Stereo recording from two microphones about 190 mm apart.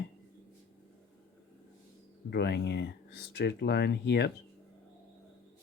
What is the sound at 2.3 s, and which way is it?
Speech, 60° left (ahead or behind).